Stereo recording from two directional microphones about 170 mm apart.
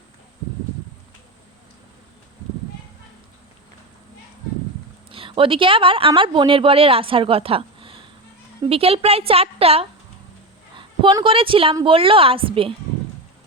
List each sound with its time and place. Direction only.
5.1 s speech: 30° right (ahead or behind)